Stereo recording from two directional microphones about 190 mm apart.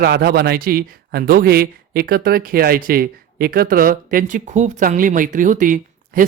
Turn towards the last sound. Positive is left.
turn(degrees=-45)  # may be behind; listen again after turning